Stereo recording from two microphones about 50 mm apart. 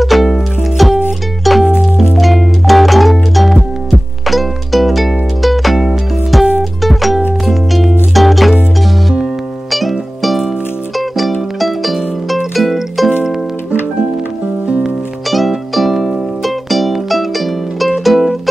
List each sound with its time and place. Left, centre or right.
0.0 s music: centre
9.7 s music: centre
15.2 s music: centre